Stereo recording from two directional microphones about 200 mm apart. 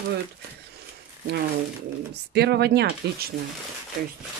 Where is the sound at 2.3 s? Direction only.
55° right (ahead or behind).